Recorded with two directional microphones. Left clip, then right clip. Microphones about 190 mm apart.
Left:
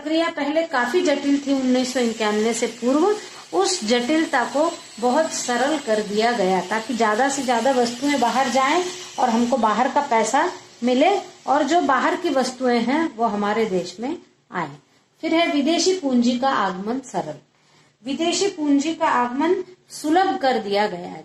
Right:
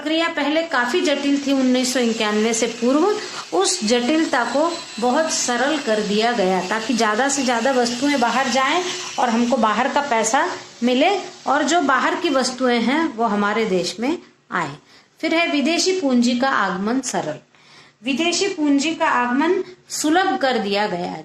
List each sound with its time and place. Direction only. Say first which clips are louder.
0.0 s a woman's voice: right 2 dB; 30° right (ahead or behind)
15.2 s a woman's voice: right 1 dB; 35° right (ahead or behind); by 21.2 s 20° right (ahead or behind)